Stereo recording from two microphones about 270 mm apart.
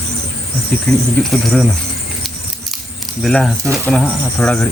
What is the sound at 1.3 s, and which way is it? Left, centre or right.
Speech, centre.